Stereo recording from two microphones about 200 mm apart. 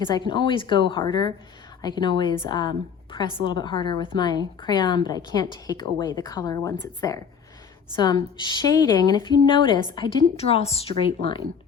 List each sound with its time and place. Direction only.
0.1 s a woman's voice: 25° left (ahead or behind)